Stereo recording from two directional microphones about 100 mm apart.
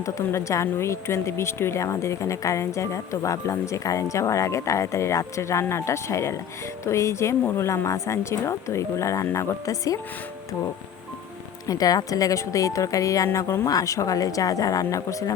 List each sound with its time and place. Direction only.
0.0 s speech: 30° left (ahead or behind)
11.7 s speech: 40° left (ahead or behind)